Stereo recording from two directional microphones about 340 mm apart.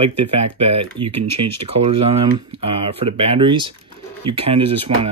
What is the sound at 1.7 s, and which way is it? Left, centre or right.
Speech, centre.